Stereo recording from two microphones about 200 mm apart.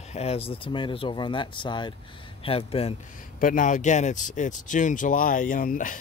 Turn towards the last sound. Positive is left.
turn(degrees=45)  # may be behind; listen again after turning